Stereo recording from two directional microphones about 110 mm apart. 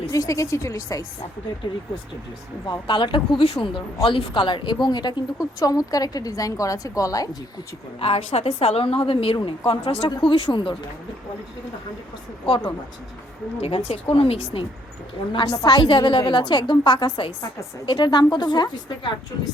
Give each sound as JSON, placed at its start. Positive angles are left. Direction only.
{"t": 0.1, "sound": "speech", "side_deg": 30}
{"t": 2.6, "sound": "a woman's voice", "side_deg": 50}
{"t": 7.9, "sound": "a woman's voice", "side_deg": 60}
{"t": 13.6, "sound": "a woman's voice", "side_deg": 65}
{"t": 15.3, "sound": "a woman's voice", "side_deg": 45}